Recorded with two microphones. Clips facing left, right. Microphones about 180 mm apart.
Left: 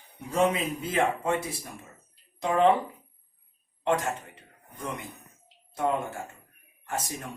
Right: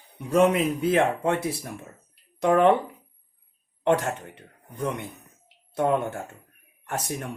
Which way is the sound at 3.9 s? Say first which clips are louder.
Right 4 dB; 60° right (ahead or behind).